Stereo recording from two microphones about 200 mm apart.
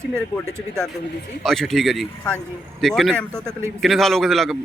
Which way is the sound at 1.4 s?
Centre (ahead or behind).